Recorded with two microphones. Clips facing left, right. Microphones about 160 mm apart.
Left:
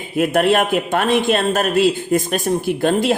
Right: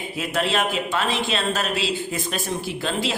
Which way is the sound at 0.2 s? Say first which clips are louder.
Left 9 dB; 55° left (ahead or behind).